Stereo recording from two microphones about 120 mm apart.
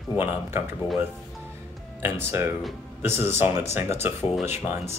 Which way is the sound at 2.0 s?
20° right (ahead or behind).